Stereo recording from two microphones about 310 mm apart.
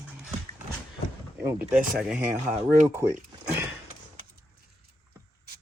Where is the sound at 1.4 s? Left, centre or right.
Centre.